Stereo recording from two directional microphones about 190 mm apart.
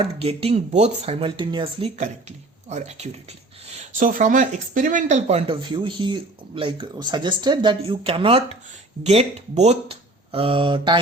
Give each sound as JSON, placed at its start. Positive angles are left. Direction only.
{"t": 0.0, "sound": "speech", "side_deg": -30}